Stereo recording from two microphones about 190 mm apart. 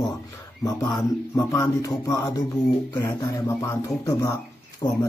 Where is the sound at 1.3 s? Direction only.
15° left (ahead or behind).